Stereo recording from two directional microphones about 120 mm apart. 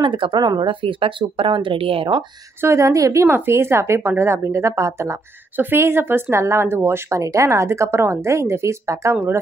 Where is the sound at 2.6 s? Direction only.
25° right (ahead or behind).